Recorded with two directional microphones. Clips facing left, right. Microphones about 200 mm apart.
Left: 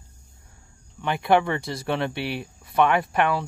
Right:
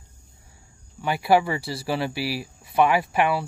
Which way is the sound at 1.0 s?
5° right (ahead or behind).